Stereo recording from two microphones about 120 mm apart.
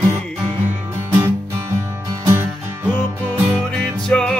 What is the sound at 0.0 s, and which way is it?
Music, 20° right (ahead or behind).